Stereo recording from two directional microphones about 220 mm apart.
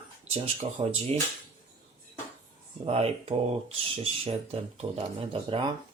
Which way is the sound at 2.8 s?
25° right (ahead or behind).